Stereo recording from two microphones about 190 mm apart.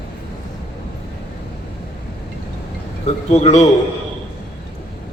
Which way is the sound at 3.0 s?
35° left (ahead or behind).